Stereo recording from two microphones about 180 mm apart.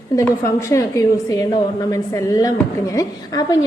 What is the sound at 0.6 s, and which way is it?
A woman's voice, 15° left (ahead or behind).